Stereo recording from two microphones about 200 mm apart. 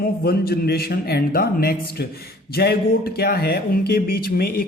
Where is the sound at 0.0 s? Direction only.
50° left (ahead or behind).